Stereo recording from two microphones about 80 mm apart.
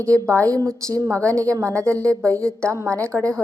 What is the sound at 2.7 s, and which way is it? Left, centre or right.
Speech, right.